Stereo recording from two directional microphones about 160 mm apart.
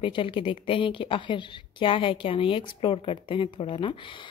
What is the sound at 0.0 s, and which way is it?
A woman's voice, 35° left (ahead or behind).